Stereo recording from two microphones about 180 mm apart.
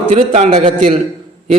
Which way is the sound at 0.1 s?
35° right (ahead or behind).